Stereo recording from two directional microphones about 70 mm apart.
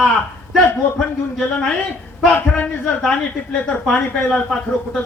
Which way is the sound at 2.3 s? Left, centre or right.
Left.